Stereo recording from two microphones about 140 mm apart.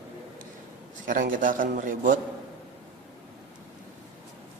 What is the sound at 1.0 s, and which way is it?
A man's voice, 75° right (ahead or behind).